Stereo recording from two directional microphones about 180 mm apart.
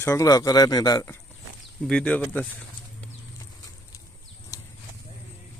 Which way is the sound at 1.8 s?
5° left (ahead or behind).